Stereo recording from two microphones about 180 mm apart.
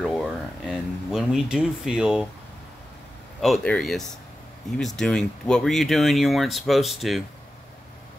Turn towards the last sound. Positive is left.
turn(degrees=0)  # may be behind; listen again after turning